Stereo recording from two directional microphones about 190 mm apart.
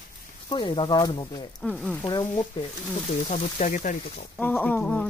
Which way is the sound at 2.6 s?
25° left (ahead or behind).